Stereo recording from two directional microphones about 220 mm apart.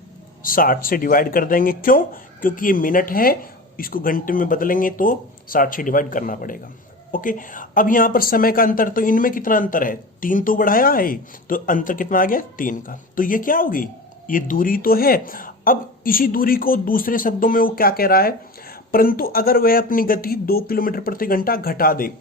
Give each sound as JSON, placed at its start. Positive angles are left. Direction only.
{"t": 0.4, "sound": "a woman's voice", "side_deg": 40}